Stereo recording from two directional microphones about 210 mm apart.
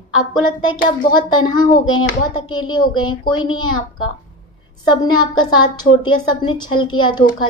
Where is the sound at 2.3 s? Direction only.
20° left (ahead or behind).